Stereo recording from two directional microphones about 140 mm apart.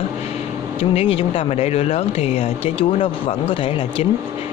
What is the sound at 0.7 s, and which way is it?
Speech, 45° left (ahead or behind).